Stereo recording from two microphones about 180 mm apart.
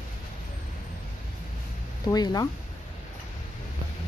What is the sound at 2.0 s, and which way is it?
Speech, 20° left (ahead or behind).